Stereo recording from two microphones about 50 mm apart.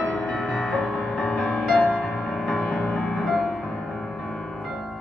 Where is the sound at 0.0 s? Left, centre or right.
Left.